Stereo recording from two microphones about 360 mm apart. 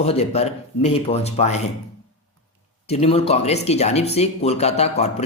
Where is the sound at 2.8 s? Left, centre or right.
Centre.